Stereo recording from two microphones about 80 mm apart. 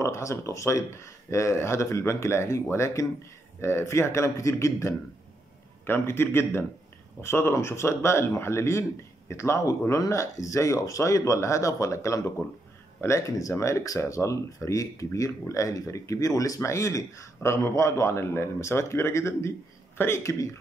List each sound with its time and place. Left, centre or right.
0.0 s a man's voice: left